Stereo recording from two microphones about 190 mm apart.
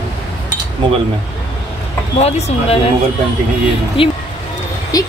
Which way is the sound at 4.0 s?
30° left (ahead or behind).